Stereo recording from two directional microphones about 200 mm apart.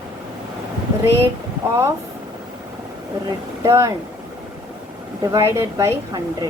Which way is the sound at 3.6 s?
15° right (ahead or behind).